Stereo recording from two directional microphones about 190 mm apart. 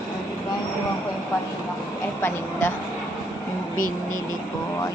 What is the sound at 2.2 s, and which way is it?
Speech, 10° left (ahead or behind).